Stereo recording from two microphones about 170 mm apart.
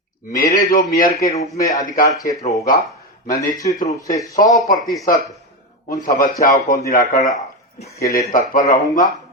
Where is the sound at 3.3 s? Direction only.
20° left (ahead or behind).